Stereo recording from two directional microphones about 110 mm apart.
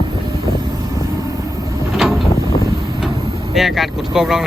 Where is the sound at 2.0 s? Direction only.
Centre (ahead or behind).